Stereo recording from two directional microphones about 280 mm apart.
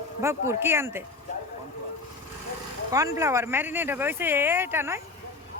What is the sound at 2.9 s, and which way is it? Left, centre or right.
Speech, centre.